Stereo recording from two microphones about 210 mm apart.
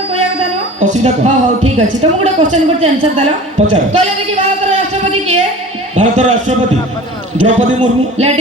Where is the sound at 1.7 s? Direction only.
30° right (ahead or behind).